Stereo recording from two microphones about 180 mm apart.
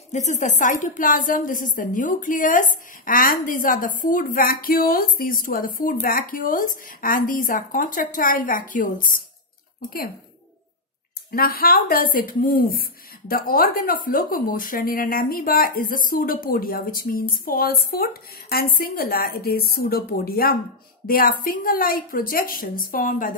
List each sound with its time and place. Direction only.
0.1 s a woman's voice: 40° left (ahead or behind)
11.3 s a woman's voice: 55° left (ahead or behind)